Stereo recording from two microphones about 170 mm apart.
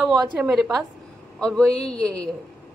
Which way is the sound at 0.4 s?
Centre (ahead or behind).